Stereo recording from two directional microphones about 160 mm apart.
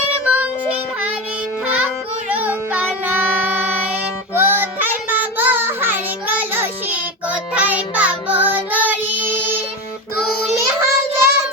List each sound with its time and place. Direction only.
0.1 s child singing: 10° right (ahead or behind)
1.6 s music: 10° right (ahead or behind)
2.3 s child singing: 10° right (ahead or behind)
4.4 s child singing: 15° right (ahead or behind)
10.8 s child singing: 15° right (ahead or behind)